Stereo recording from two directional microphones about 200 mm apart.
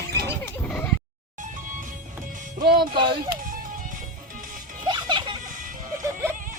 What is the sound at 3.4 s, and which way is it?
Music, 45° right (ahead or behind).